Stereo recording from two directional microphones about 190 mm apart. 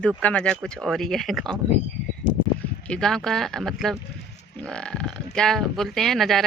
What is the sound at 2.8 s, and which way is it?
Speech, 5° left (ahead or behind).